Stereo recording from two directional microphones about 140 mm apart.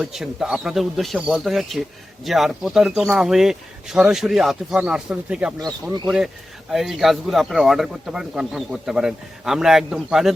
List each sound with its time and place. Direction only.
0.0 s a man's voice: 5° right (ahead or behind)